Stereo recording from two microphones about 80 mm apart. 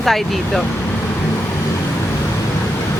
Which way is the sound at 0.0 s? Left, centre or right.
Centre.